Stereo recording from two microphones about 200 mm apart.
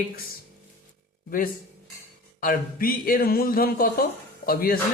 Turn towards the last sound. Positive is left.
turn(degrees=50)  # may be behind; listen again after turning